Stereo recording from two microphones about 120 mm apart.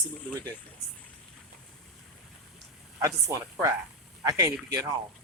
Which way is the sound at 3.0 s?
25° right (ahead or behind).